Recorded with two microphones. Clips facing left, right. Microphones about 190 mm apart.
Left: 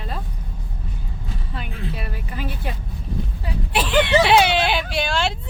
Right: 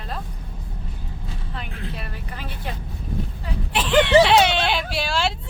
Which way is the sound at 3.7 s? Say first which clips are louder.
Right 2 dB; 10° left (ahead or behind).